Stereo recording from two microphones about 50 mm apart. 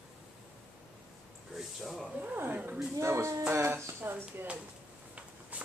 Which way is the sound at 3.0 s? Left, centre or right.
Right.